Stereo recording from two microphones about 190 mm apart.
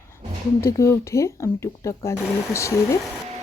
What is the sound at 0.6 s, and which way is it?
Speech, 15° left (ahead or behind).